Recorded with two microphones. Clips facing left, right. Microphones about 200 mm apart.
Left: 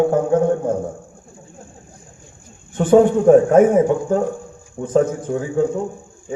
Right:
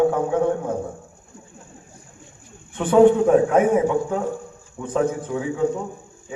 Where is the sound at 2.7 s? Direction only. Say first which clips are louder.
Left 1 dB; 45° left (ahead or behind).